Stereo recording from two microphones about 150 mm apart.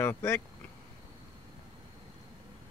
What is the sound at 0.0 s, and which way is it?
Speech, 15° left (ahead or behind).